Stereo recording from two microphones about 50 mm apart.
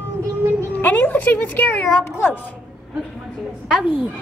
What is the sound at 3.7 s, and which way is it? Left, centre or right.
Speech, centre.